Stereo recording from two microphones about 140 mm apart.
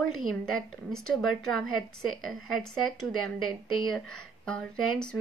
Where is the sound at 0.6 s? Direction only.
5° left (ahead or behind).